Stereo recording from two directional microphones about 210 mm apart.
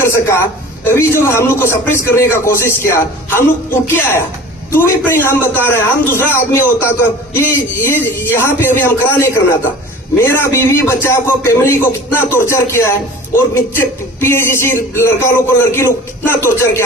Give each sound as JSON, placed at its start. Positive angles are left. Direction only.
{"t": 0.0, "sound": "a man's voice", "side_deg": 10}
{"t": 7.9, "sound": "a man's voice", "side_deg": 10}